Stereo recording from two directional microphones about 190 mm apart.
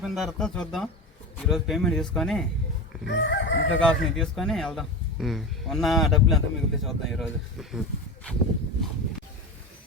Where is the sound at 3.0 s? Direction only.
70° left (ahead or behind).